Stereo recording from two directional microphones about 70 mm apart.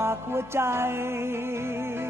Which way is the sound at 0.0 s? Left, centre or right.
Right.